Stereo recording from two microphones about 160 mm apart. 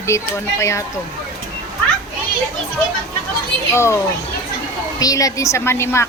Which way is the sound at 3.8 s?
15° left (ahead or behind).